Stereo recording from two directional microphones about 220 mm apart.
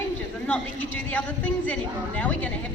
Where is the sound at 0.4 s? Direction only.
5° left (ahead or behind).